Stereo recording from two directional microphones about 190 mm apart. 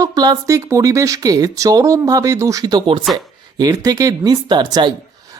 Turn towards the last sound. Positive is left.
turn(degrees=-20)  # may be behind; listen again after turning